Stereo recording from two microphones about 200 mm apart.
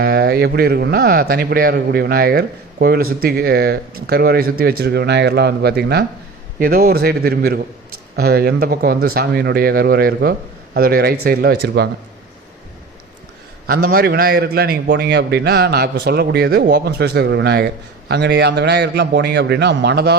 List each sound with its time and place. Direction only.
0.0 s speech: 50° right (ahead or behind)
13.9 s a man's voice: 50° right (ahead or behind)